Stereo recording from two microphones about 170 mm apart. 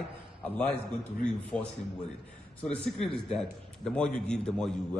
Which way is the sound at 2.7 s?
5° left (ahead or behind).